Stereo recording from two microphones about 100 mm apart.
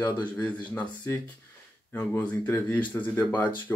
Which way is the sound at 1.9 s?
20° left (ahead or behind).